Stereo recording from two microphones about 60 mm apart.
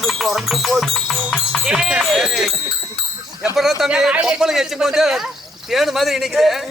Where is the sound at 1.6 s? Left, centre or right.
Centre.